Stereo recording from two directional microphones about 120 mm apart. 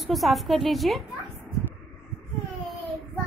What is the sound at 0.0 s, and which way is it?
A woman's voice, centre (ahead or behind).